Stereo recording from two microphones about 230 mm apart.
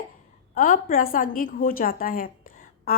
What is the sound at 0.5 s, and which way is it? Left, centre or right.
A woman's voice, left.